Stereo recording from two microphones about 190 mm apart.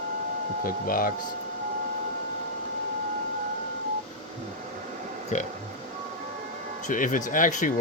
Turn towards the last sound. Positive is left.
turn(degrees=45)  # may be behind; listen again after turning